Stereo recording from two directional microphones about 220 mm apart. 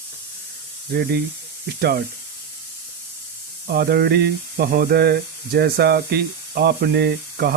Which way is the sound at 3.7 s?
45° right (ahead or behind).